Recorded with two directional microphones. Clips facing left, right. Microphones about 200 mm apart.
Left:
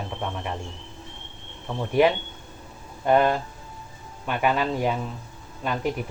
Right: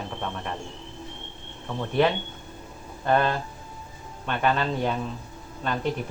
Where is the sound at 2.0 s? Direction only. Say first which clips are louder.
Left 3 dB; 10° left (ahead or behind).